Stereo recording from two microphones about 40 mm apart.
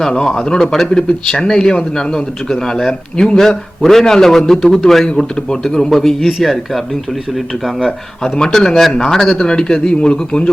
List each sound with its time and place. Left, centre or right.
0.0 s a man's voice: centre
8.2 s a man's voice: centre